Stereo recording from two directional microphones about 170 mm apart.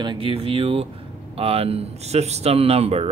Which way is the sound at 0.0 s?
30° right (ahead or behind).